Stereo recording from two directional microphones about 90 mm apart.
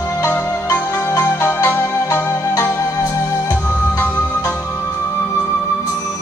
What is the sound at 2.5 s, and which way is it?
Music, 35° left (ahead or behind).